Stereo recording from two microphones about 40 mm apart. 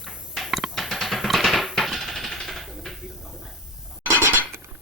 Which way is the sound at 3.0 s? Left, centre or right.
Centre.